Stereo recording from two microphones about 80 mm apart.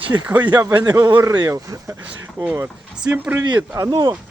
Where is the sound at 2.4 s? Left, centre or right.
Right.